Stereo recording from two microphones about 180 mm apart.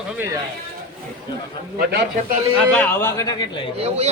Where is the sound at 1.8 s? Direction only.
65° right (ahead or behind).